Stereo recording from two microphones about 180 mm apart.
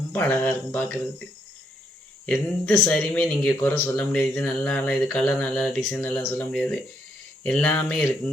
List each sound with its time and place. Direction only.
0.1 s speech: 10° left (ahead or behind)
2.2 s speech: 5° left (ahead or behind)